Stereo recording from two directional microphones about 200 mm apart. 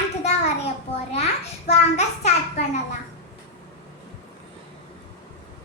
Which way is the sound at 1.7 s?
35° left (ahead or behind).